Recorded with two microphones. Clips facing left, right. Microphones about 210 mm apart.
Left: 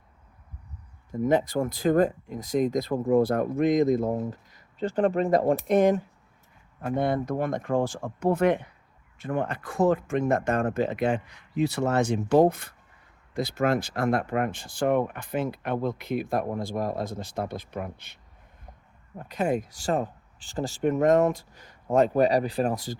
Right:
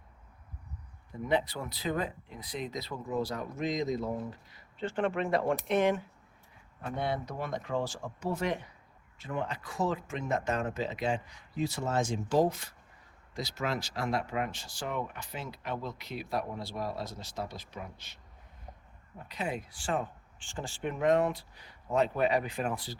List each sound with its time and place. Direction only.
1.1 s speech: 45° left (ahead or behind)
19.2 s speech: 50° left (ahead or behind)